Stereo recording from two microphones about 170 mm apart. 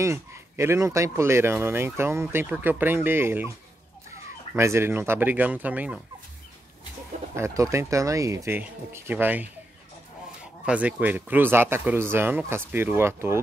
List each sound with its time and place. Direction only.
0.0 s speech: 15° right (ahead or behind)
7.3 s speech: 15° right (ahead or behind)
10.6 s speech: 5° right (ahead or behind)